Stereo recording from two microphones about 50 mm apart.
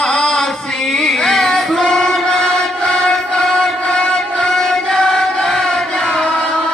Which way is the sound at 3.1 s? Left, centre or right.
Centre.